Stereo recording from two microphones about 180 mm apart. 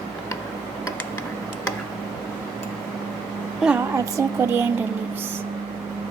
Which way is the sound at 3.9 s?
15° right (ahead or behind).